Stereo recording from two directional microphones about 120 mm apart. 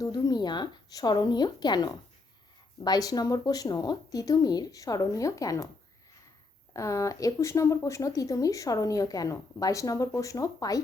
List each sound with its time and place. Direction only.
0.0 s speech: 35° left (ahead or behind)
6.7 s speech: 25° left (ahead or behind)